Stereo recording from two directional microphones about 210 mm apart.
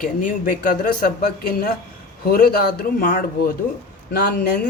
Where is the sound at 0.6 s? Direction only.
40° left (ahead or behind).